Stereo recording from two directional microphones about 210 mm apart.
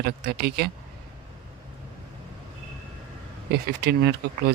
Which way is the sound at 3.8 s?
50° right (ahead or behind).